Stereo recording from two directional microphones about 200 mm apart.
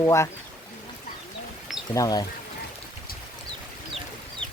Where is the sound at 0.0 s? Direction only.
15° left (ahead or behind).